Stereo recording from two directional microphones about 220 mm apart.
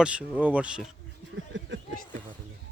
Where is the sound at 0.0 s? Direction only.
5° right (ahead or behind).